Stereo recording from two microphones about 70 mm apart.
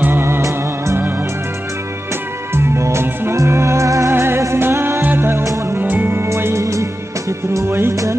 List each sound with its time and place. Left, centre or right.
0.0 s music: right
2.5 s music: right
4.1 s music: right
5.4 s music: right
5.8 s music: right